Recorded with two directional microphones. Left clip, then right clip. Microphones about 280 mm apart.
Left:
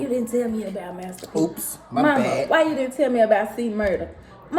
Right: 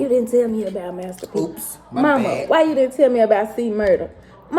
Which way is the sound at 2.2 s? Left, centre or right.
Centre.